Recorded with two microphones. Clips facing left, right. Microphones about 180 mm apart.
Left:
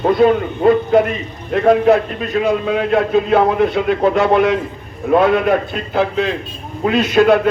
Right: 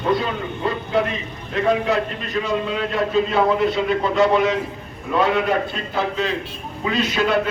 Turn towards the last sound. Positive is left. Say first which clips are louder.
# left 8 dB
turn(degrees=55)  # may be behind; listen again after turning